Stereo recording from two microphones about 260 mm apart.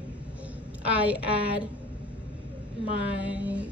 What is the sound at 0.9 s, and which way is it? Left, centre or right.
Speech, centre.